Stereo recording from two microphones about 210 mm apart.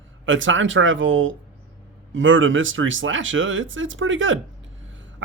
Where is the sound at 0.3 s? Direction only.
65° right (ahead or behind).